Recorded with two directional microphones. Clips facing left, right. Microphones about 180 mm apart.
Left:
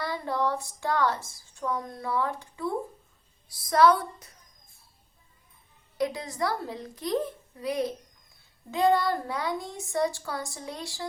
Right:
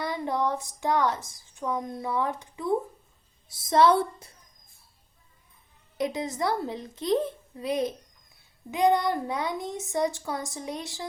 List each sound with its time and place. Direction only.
0.0 s speech: 20° right (ahead or behind)
6.0 s speech: 20° right (ahead or behind)